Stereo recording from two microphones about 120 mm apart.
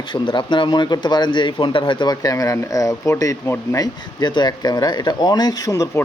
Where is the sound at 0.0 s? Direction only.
40° left (ahead or behind); by 3.8 s 20° left (ahead or behind).